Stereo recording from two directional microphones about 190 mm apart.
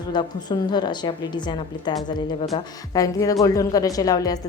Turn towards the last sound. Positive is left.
turn(degrees=20)  # may be behind; listen again after turning